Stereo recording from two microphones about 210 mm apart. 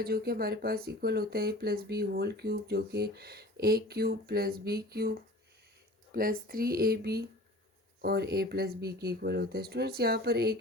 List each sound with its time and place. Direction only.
0.0 s speech: 45° right (ahead or behind)